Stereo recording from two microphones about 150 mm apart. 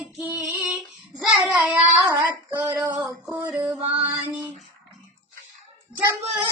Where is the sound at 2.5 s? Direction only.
20° right (ahead or behind).